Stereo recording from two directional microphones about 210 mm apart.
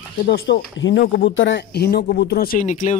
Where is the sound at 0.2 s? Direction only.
50° left (ahead or behind).